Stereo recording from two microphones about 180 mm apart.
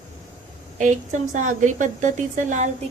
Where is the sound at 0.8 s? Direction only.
45° right (ahead or behind).